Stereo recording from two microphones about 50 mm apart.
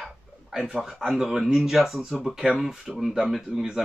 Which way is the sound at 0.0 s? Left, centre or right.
Centre.